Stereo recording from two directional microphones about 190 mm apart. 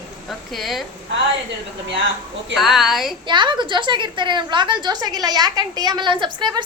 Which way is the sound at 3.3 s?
25° right (ahead or behind).